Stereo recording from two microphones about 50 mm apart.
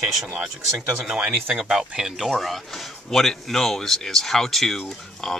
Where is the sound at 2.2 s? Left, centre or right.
Centre.